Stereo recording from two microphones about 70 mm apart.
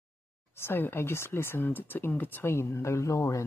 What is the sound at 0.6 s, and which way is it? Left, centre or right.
Speech, left.